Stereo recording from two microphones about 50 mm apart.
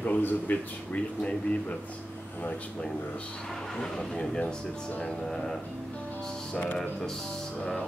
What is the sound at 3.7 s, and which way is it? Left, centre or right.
A man's voice, centre.